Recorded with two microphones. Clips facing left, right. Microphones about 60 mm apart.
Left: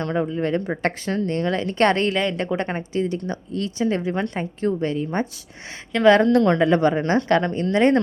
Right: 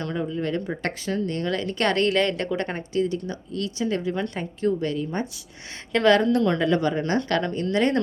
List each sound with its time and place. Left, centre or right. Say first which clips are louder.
0.0 s speech: left 4 dB; left
3.0 s speech: right 2 dB; left
6.2 s a woman's voice: left 4 dB; left
6.6 s speech: left 4 dB; left